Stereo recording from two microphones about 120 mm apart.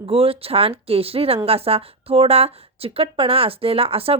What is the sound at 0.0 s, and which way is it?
Speech, 50° right (ahead or behind).